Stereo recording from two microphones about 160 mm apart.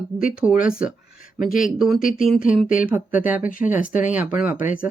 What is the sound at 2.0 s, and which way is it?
Speech, 60° left (ahead or behind).